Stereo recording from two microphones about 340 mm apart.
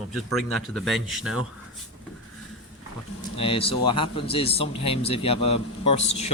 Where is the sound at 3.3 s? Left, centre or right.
Centre.